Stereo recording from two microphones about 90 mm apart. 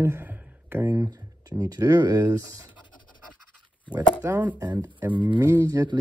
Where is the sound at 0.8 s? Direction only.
40° right (ahead or behind).